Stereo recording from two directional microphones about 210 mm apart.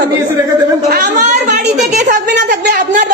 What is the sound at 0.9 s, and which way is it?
A woman's voice, 35° right (ahead or behind).